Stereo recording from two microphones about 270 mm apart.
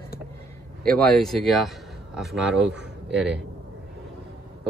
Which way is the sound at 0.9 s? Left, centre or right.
Centre.